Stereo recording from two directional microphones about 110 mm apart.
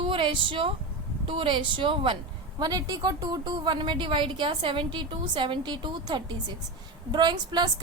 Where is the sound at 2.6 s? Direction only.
35° right (ahead or behind).